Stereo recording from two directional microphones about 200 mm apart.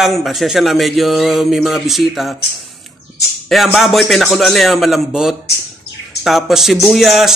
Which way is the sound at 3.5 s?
Centre (ahead or behind).